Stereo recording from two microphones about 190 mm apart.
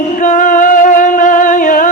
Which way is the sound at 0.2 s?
40° left (ahead or behind).